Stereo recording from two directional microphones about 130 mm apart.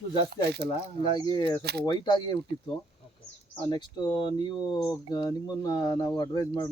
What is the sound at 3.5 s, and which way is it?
Speech, 35° left (ahead or behind).